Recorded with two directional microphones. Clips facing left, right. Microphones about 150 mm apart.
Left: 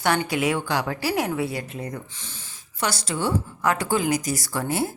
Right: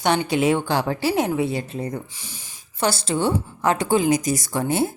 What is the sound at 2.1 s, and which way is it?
Speech, 10° right (ahead or behind).